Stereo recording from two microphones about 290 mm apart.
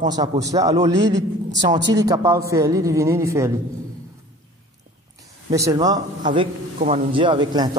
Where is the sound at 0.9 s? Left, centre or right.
Right.